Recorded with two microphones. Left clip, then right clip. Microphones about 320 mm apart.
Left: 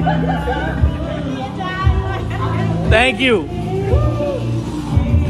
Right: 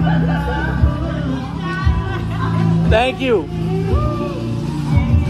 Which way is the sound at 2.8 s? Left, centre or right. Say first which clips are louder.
Left 3 dB; left.